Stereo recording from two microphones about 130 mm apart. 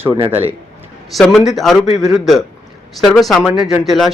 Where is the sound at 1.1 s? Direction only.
Centre (ahead or behind).